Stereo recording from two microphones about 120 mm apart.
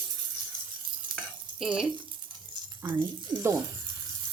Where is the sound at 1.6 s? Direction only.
5° right (ahead or behind).